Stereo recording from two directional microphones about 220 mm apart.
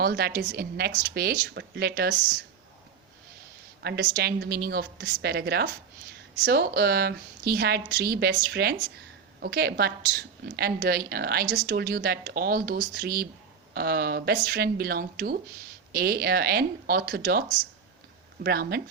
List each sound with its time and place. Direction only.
0.0 s a woman's voice: 45° right (ahead or behind)
3.8 s a woman's voice: 45° right (ahead or behind)